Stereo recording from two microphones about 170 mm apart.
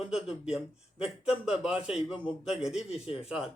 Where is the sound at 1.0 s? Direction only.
5° right (ahead or behind).